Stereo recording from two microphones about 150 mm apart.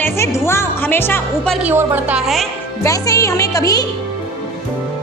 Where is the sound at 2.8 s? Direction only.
20° left (ahead or behind).